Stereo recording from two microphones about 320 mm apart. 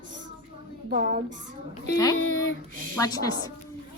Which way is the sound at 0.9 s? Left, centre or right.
Right.